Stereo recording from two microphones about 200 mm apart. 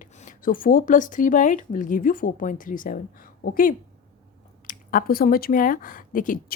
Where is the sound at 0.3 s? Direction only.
45° left (ahead or behind).